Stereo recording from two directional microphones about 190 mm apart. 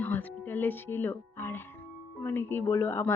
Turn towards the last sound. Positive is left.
turn(degrees=15)  # may be behind; listen again after turning